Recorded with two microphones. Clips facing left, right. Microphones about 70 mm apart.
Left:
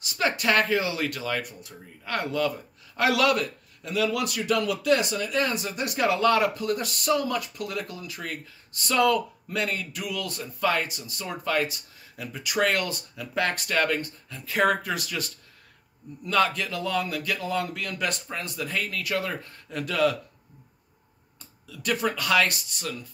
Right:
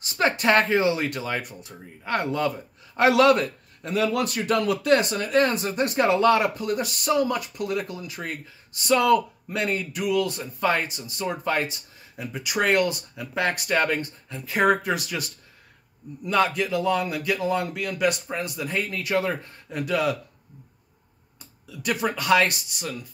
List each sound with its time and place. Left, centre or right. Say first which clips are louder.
0.0 s a man's voice: right 3 dB; right; by 20.2 s centre
21.6 s a man's voice: right 1 dB; centre